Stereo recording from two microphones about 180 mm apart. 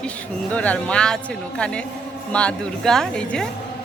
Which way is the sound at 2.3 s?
5° left (ahead or behind).